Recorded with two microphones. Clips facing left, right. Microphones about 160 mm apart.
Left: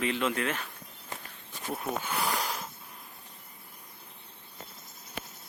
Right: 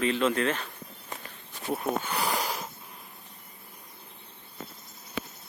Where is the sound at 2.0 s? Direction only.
Centre (ahead or behind).